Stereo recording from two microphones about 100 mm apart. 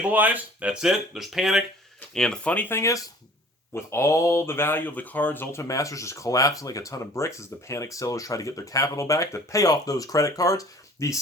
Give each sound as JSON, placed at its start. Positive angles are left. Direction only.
{"t": 0.0, "sound": "speech", "side_deg": -15}
{"t": 2.6, "sound": "speech", "side_deg": 30}